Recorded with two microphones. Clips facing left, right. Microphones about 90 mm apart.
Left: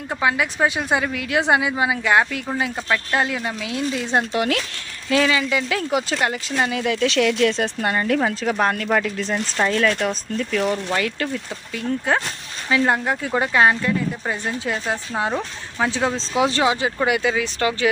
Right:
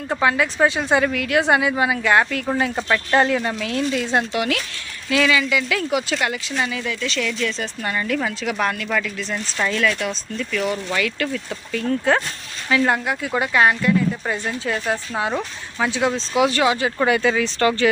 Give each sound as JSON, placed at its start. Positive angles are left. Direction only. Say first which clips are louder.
{"t": 0.2, "sound": "a woman's voice", "louder": "right 2 dB", "side_deg": 10}
{"t": 2.7, "sound": "speech", "louder": "right 4 dB", "side_deg": 0}
{"t": 3.9, "sound": "speech", "louder": "right 1 dB", "side_deg": 25}
{"t": 4.4, "sound": "speech", "louder": "left 1 dB", "side_deg": 40}
{"t": 6.7, "sound": "speech", "louder": "left 5 dB", "side_deg": 60}
{"t": 11.7, "sound": "a woman's voice", "louder": "right 2 dB", "side_deg": 15}
{"t": 13.9, "sound": "speech", "louder": "right 4 dB", "side_deg": 10}
{"t": 14.3, "sound": "speech", "louder": "right 1 dB", "side_deg": 20}
{"t": 15.8, "sound": "speech", "louder": "right 1 dB", "side_deg": 30}
{"t": 17.0, "sound": "a woman's voice", "louder": "right 4 dB", "side_deg": 15}